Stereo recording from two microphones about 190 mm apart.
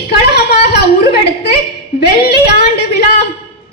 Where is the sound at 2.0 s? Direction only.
55° left (ahead or behind).